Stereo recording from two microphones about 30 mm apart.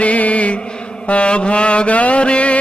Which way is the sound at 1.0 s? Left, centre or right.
Left.